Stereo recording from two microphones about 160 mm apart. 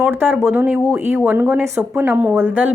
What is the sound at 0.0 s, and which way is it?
A woman's voice, 10° right (ahead or behind).